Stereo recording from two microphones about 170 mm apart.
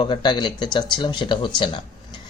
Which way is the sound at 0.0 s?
25° left (ahead or behind).